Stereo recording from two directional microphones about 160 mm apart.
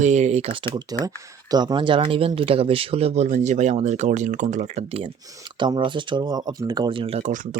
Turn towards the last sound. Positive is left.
turn(degrees=-55)  # may be behind; listen again after turning